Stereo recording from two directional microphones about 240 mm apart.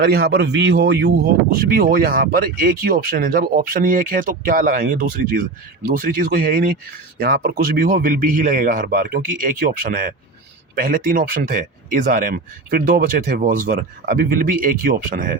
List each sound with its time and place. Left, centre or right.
0.0 s a man's voice: right